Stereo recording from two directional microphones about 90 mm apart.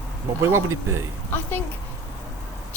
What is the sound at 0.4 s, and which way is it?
Speech, 30° right (ahead or behind).